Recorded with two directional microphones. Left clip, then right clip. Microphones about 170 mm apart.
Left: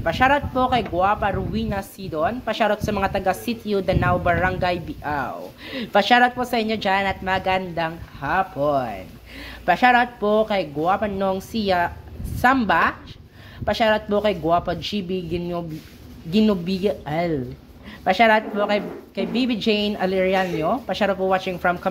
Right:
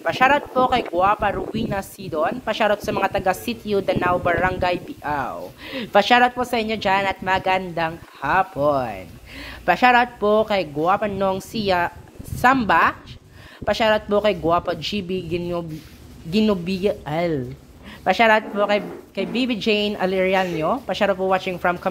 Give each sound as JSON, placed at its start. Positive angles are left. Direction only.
{"t": 0.0, "sound": "speech", "side_deg": -30}
{"t": 8.2, "sound": "speech", "side_deg": -40}